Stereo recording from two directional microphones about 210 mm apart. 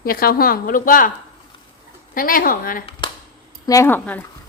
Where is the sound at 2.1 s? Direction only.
40° left (ahead or behind).